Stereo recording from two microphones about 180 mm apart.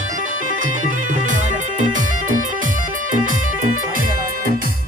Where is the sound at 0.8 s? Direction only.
45° right (ahead or behind).